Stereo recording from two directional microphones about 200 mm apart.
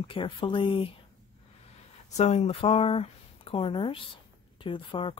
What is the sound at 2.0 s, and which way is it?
Speech, 35° left (ahead or behind).